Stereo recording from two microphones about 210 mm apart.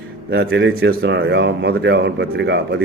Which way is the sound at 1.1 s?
55° right (ahead or behind).